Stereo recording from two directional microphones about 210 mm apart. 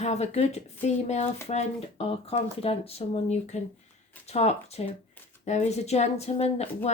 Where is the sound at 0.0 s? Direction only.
30° left (ahead or behind).